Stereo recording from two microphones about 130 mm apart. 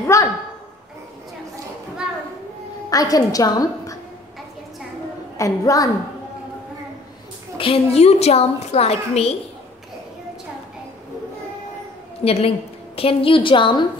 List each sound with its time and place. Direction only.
0.0 s a sound: 25° left (ahead or behind)
2.9 s a woman's voice: 30° left (ahead or behind)
5.4 s a woman's voice: 25° left (ahead or behind)
7.5 s a woman's voice: 45° left (ahead or behind)
12.3 s a woman's voice: 50° left (ahead or behind)